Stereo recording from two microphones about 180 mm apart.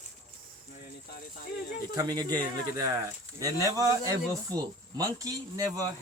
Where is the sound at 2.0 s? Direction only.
20° right (ahead or behind).